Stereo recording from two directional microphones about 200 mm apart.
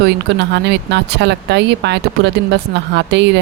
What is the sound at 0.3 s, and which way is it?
Speech, 60° right (ahead or behind).